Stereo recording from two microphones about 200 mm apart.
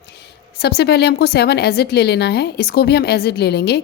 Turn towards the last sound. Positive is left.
turn(degrees=55)  # may be behind; listen again after turning